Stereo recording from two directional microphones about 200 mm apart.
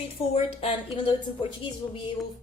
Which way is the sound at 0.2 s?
30° left (ahead or behind).